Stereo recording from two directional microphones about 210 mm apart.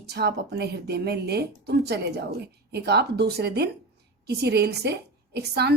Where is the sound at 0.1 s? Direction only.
50° right (ahead or behind).